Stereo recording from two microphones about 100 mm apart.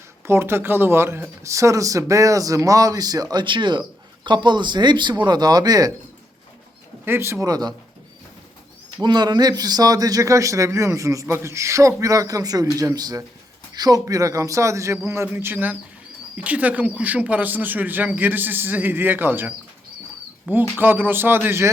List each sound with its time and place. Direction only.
0.3 s speech: 25° right (ahead or behind)
7.0 s speech: 25° right (ahead or behind)
7.4 s speech: 40° right (ahead or behind)
9.0 s speech: 45° right (ahead or behind); by 21.7 s 25° right (ahead or behind)